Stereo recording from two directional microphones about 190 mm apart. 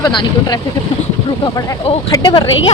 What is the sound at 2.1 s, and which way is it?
Speech, 20° left (ahead or behind).